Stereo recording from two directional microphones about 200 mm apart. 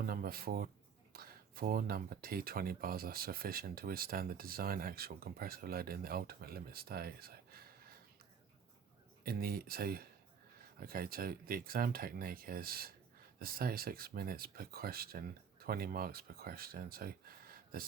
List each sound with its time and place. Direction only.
0.0 s speech: 50° right (ahead or behind)
9.2 s speech: 50° right (ahead or behind)